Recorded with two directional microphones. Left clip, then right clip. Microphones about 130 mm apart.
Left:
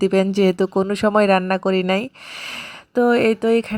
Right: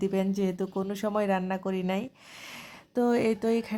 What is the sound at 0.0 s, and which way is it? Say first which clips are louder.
Speech: left 12 dB; 30° left (ahead or behind).